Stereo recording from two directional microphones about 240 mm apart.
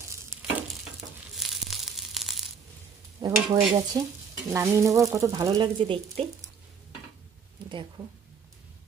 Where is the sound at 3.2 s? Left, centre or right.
Centre.